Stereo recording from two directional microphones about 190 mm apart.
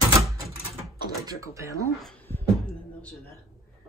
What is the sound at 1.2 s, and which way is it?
Speech, 15° right (ahead or behind).